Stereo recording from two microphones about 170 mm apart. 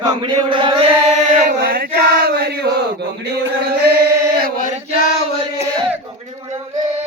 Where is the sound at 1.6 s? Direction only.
65° right (ahead or behind).